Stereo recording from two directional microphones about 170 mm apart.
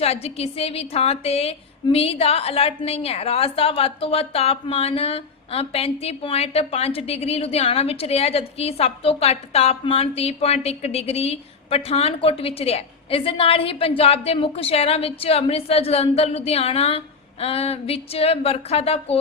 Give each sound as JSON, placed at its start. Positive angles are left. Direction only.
{"t": 0.0, "sound": "a woman's voice", "side_deg": 35}